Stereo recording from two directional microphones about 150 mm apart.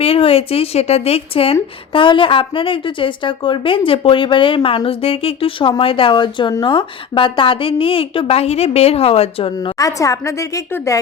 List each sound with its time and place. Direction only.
0.0 s a woman's voice: 40° left (ahead or behind)
9.7 s speech: 25° left (ahead or behind)